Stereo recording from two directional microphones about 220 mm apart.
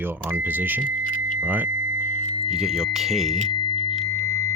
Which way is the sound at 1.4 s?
10° right (ahead or behind).